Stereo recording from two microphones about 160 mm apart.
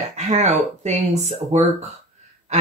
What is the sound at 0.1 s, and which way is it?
Speech, 45° right (ahead or behind).